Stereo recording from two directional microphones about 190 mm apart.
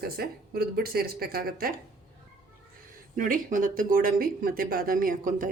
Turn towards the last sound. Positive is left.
turn(degrees=-45)  # may be behind; listen again after turning